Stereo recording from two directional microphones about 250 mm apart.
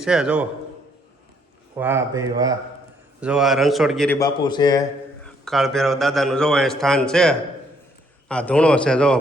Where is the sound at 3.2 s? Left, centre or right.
Centre.